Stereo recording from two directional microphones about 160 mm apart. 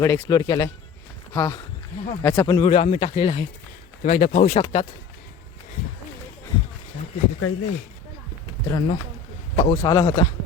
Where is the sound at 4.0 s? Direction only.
45° left (ahead or behind).